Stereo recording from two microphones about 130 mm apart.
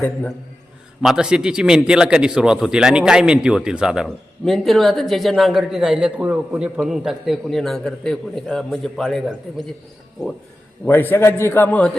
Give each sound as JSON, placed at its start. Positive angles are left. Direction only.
{"t": 0.0, "sound": "a man's voice", "side_deg": 15}
{"t": 1.0, "sound": "speech", "side_deg": -5}
{"t": 10.8, "sound": "a man's voice", "side_deg": 15}